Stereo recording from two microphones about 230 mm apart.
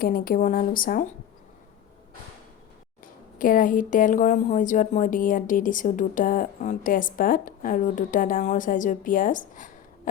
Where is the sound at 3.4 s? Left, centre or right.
Left.